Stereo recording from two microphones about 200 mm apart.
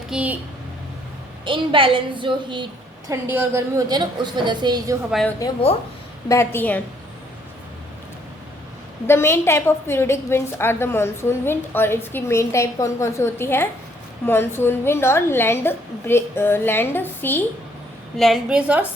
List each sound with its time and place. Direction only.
0.1 s speech: 5° right (ahead or behind)
1.5 s a woman's voice: 25° right (ahead or behind)
3.1 s a woman's voice: 10° right (ahead or behind)
5.4 s a woman's voice: 15° left (ahead or behind)
9.0 s a woman's voice: 10° left (ahead or behind)
18.2 s a woman's voice: centre (ahead or behind)